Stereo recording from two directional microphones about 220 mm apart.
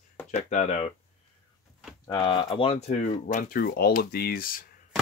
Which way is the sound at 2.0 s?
20° left (ahead or behind).